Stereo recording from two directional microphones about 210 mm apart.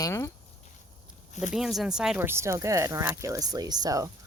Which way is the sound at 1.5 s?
Centre (ahead or behind).